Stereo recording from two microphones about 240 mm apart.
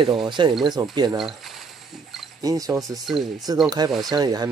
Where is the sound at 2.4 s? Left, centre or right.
Centre.